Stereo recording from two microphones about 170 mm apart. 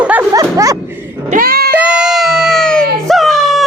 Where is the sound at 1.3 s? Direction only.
60° right (ahead or behind).